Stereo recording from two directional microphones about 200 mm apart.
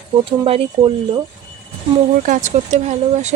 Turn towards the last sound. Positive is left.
turn(degrees=-35)  # may be behind; listen again after turning